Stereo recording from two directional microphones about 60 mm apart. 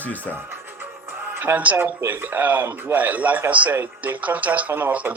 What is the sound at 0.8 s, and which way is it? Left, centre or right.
Music, right.